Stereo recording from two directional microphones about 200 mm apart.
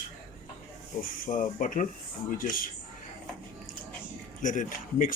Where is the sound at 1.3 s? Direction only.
40° left (ahead or behind).